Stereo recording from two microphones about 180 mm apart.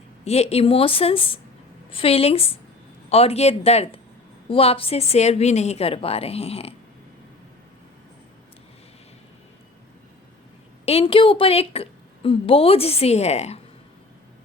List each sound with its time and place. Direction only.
0.3 s a woman's voice: 35° left (ahead or behind)
10.8 s a woman's voice: 30° left (ahead or behind)